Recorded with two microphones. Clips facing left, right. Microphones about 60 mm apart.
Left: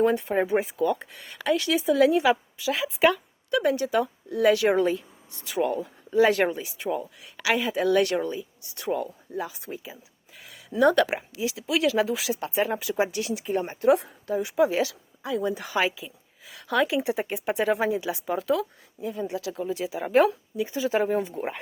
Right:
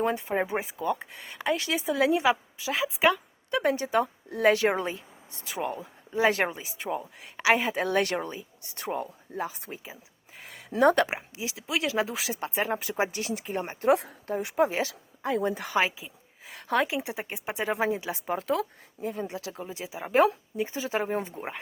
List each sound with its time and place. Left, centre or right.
0.0 s speech: centre; by 13.9 s right
13.9 s a woman's voice: right
15.8 s a sound: right
16.8 s speech: right
19.6 s speech: right
20.6 s speech: right